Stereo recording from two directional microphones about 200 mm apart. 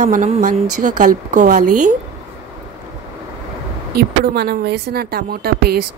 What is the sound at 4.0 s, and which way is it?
Speech, 55° right (ahead or behind).